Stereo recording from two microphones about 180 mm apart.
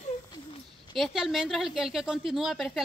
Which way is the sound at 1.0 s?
Centre (ahead or behind).